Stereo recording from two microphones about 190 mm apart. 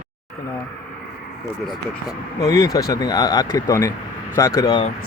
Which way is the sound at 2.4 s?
15° left (ahead or behind).